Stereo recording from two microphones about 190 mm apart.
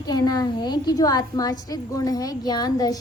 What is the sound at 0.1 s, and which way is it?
A woman's voice, 20° left (ahead or behind).